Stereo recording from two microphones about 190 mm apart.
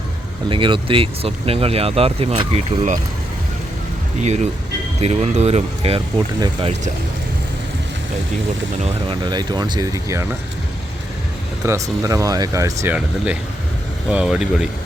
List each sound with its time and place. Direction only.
0.5 s speech: 25° right (ahead or behind)
4.9 s speech: 35° right (ahead or behind)
8.7 s speech: 35° right (ahead or behind)
9.3 s speech: 20° right (ahead or behind)
11.6 s speech: 15° right (ahead or behind)